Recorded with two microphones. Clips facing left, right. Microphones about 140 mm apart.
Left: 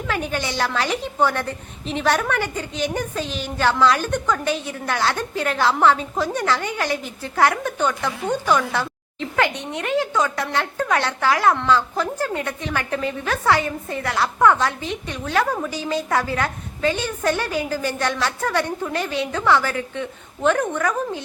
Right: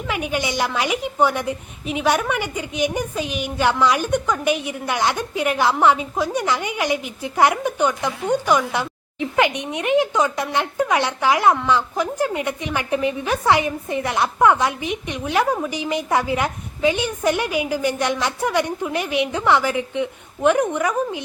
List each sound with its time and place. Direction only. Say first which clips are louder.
0.1 s a woman's voice: right 2 dB; 15° right (ahead or behind)